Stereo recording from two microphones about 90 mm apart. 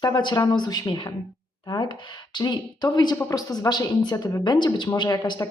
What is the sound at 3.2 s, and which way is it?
Speech, 45° left (ahead or behind).